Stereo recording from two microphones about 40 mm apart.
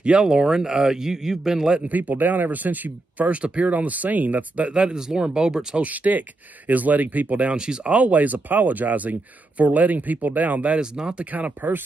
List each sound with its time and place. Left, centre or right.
0.0 s speech: centre
1.9 s speech: right
4.6 s speech: right
5.9 s speech: right
7.5 s speech: right
7.9 s speech: right
10.8 s speech: centre
11.1 s speech: right